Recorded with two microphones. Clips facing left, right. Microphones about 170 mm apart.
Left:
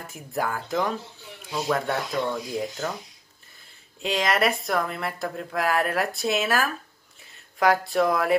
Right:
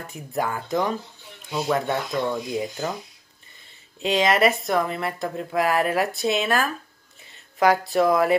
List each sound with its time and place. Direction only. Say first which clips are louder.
0.0 s speech: right 2 dB; centre (ahead or behind)